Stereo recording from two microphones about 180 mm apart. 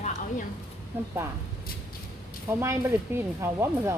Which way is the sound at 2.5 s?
15° right (ahead or behind).